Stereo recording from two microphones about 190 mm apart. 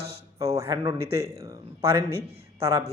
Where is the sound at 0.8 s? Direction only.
25° right (ahead or behind).